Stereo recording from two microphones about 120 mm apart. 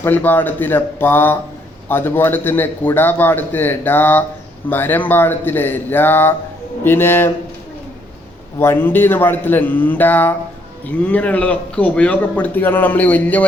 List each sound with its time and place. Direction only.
0.0 s a man's voice: 15° left (ahead or behind)
8.5 s a man's voice: 20° left (ahead or behind)